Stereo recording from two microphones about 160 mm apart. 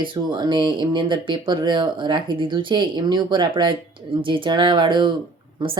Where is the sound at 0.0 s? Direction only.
30° right (ahead or behind).